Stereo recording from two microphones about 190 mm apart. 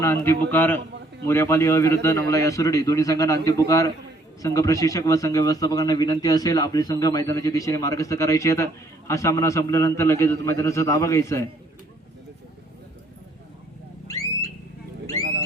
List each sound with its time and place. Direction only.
0.0 s speech: 15° left (ahead or behind)